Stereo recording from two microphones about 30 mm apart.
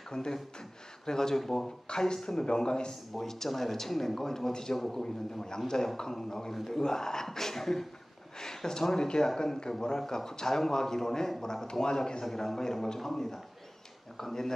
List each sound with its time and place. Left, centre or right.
0.1 s speech: left
1.4 s speech: centre
1.9 s speech: left
3.1 s speech: centre
6.8 s speech: centre
11.8 s speech: left
12.3 s speech: centre